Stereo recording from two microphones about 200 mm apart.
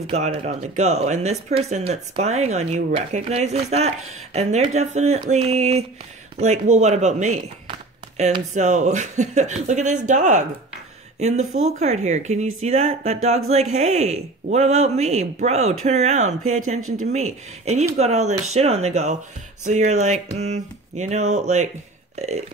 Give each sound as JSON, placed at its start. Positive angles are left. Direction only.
{"t": 0.0, "sound": "speech", "side_deg": -30}
{"t": 11.3, "sound": "speech", "side_deg": -90}
{"t": 11.8, "sound": "speech", "side_deg": -35}